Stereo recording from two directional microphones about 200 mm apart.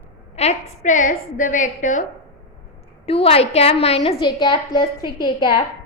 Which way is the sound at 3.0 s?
30° left (ahead or behind).